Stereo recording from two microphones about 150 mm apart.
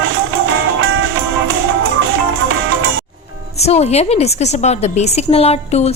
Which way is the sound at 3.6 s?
45° left (ahead or behind).